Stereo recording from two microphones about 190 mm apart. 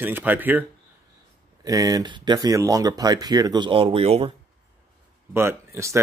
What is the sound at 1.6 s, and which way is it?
Speech, 20° right (ahead or behind).